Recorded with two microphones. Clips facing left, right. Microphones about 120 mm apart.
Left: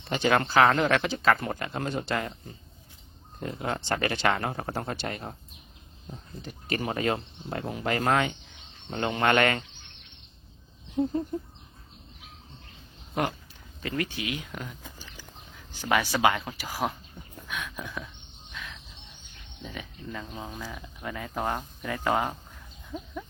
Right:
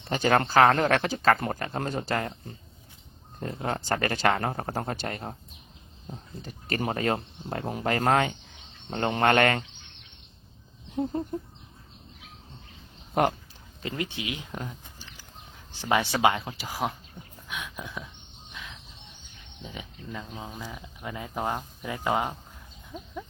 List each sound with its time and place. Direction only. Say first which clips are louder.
0.1 s speech: right 1 dB; 45° right (ahead or behind)
6.4 s speech: right 1 dB; 40° right (ahead or behind)
13.2 s speech: right 5 dB; 50° right (ahead or behind)
13.8 s speech: left 1 dB; 25° right (ahead or behind)
18.5 s bird: left 1 dB; 15° right (ahead or behind)
19.6 s speech: left 1 dB; 15° right (ahead or behind)